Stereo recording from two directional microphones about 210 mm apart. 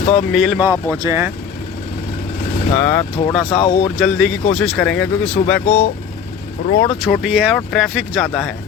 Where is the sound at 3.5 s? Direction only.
25° left (ahead or behind).